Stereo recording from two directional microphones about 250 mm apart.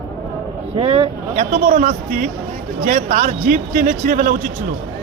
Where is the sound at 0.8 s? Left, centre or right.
Right.